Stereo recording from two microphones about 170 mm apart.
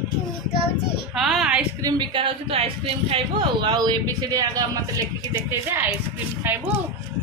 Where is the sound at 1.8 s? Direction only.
25° right (ahead or behind).